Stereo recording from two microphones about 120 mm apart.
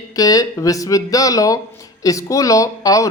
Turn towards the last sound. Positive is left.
turn(degrees=30)  # may be behind; listen again after turning